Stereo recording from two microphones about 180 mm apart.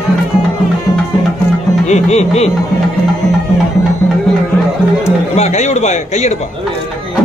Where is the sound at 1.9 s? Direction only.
40° left (ahead or behind).